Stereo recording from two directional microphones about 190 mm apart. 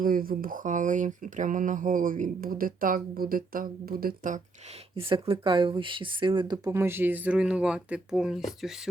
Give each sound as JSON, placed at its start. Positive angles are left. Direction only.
{"t": 0.0, "sound": "speech", "side_deg": -50}
{"t": 4.9, "sound": "speech", "side_deg": -30}